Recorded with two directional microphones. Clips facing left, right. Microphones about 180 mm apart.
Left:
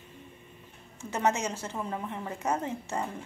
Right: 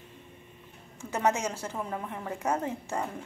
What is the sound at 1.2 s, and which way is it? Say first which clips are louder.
A woman's voice: right 1 dB; 10° right (ahead or behind).